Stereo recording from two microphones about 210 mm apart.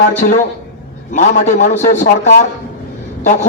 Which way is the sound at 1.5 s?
35° left (ahead or behind).